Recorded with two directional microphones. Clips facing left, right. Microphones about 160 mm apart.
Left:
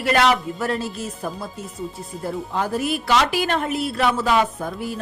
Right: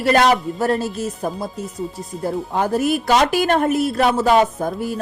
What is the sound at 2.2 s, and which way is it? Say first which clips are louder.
A woman's voice: right 4 dB; 45° right (ahead or behind).